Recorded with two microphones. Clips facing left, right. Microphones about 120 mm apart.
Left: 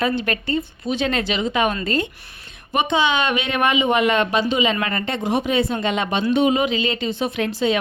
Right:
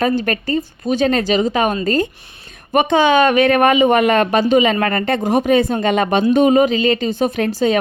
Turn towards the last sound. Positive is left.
turn(degrees=-45)  # may be behind; listen again after turning